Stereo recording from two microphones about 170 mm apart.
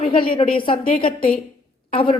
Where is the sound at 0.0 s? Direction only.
30° left (ahead or behind).